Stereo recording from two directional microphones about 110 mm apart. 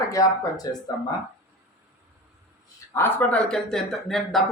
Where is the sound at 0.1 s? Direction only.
35° left (ahead or behind).